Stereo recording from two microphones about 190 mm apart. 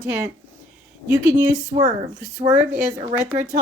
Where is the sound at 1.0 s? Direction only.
15° right (ahead or behind).